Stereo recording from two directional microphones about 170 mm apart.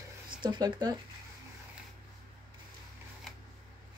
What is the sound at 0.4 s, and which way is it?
Speech, 25° right (ahead or behind).